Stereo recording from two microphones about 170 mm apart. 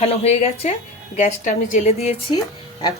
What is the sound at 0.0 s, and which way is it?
A woman's voice, 35° left (ahead or behind).